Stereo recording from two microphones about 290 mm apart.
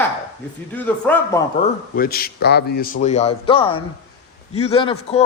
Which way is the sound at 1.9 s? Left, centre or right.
Left.